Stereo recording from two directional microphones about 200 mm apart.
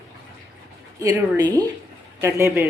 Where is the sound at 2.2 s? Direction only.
15° right (ahead or behind).